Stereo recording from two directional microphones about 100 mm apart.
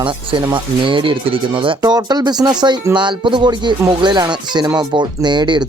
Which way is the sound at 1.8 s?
40° right (ahead or behind).